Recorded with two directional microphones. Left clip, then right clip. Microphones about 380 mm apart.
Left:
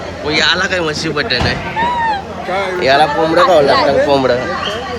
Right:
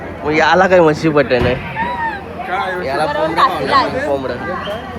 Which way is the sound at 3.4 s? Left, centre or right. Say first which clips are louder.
Left 4 dB; right.